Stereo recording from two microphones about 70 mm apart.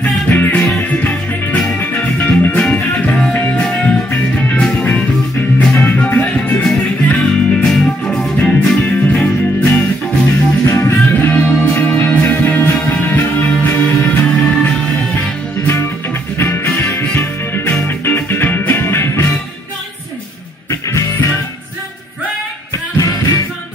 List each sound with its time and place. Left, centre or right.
0.0 s music: left
10.6 s music: left
14.2 s music: centre
16.3 s music: left
22.9 s music: left